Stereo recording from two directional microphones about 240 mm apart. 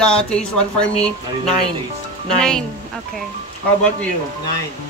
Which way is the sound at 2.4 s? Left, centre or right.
Centre.